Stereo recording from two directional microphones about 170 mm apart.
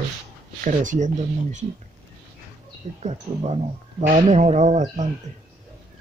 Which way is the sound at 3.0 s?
40° right (ahead or behind).